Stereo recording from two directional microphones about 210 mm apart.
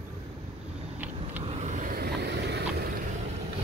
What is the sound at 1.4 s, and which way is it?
Vehicle, 30° right (ahead or behind).